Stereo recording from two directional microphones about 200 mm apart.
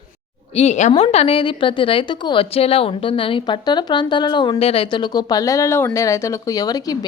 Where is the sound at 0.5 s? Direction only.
35° left (ahead or behind).